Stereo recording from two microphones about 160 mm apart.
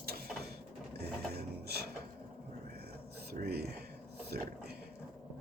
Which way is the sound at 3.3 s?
80° right.